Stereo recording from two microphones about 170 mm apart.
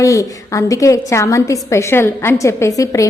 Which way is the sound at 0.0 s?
20° left (ahead or behind).